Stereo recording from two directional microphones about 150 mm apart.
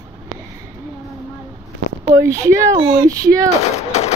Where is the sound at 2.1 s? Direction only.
20° right (ahead or behind).